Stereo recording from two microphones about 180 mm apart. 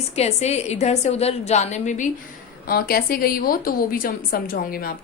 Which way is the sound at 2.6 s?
55° left (ahead or behind).